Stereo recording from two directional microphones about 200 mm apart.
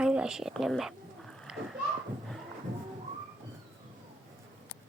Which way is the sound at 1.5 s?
5° right (ahead or behind).